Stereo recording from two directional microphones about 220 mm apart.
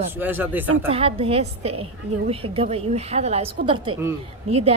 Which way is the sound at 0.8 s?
25° right (ahead or behind).